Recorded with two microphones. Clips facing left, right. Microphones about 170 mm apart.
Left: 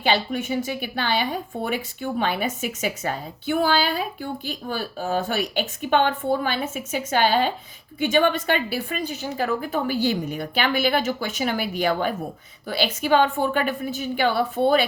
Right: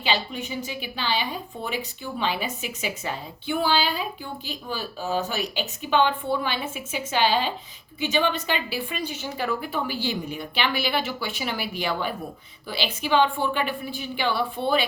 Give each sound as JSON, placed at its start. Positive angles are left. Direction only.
{"t": 0.0, "sound": "speech", "side_deg": 50}